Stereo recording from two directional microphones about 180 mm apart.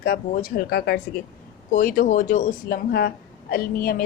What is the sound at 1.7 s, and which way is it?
A woman's voice, 50° left (ahead or behind).